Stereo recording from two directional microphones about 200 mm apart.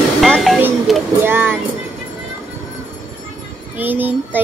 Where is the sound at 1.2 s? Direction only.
10° right (ahead or behind).